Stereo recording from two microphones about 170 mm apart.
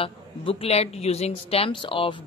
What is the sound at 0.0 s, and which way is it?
Speech, 35° left (ahead or behind).